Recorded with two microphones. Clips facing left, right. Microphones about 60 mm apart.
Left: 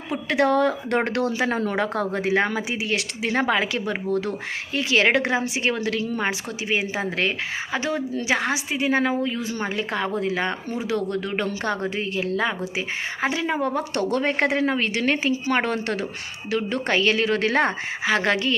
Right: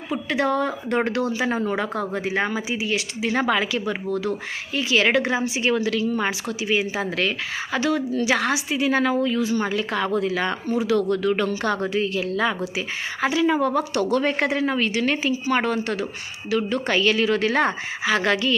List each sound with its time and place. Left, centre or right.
0.1 s a woman's voice: left
3.3 s a woman's voice: left
12.2 s a woman's voice: left
13.6 s a woman's voice: left